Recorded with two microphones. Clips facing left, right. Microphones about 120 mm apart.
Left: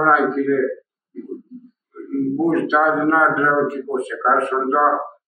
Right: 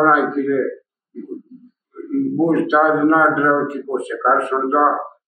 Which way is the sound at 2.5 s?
15° right (ahead or behind).